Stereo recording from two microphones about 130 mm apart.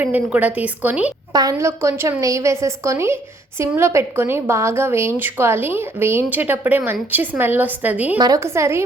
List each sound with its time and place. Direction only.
0.0 s a woman's voice: 10° right (ahead or behind)
1.3 s a woman's voice: 30° right (ahead or behind); by 8.2 s 15° right (ahead or behind)
8.2 s a woman's voice: 25° right (ahead or behind)